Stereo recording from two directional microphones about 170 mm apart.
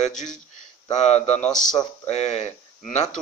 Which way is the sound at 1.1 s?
40° left (ahead or behind).